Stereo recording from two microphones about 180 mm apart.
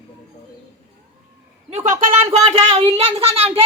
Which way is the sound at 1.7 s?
40° right (ahead or behind).